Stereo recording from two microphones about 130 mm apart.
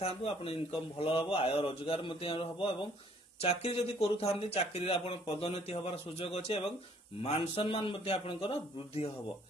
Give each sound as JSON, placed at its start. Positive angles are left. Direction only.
{"t": 0.0, "sound": "speech", "side_deg": 50}